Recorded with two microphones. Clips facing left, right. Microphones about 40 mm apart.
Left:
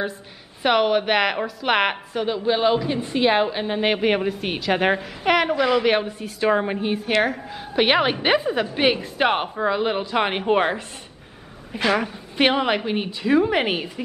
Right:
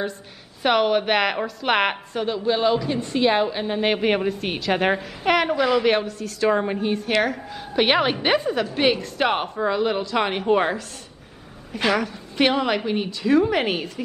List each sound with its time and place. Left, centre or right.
0.6 s a woman's voice: centre
6.0 s a woman's voice: centre
11.9 s a woman's voice: centre